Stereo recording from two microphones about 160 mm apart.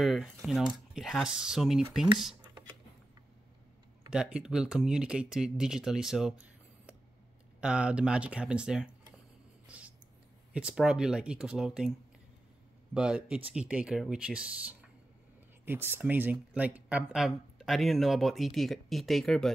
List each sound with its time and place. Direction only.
0.0 s speech: centre (ahead or behind)
4.1 s speech: 5° right (ahead or behind)
7.6 s speech: 5° right (ahead or behind)
9.7 s a sound: 10° right (ahead or behind)
10.5 s speech: 5° right (ahead or behind)
12.9 s speech: 5° right (ahead or behind)